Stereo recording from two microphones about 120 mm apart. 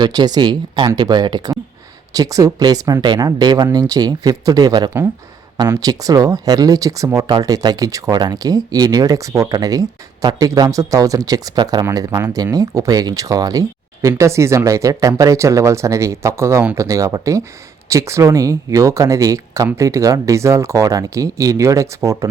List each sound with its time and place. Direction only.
0.0 s speech: 35° right (ahead or behind)